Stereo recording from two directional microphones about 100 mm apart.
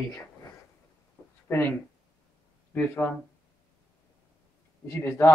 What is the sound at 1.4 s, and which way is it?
Speech, 20° left (ahead or behind).